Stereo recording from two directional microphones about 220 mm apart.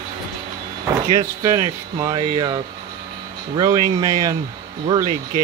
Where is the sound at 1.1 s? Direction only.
15° right (ahead or behind).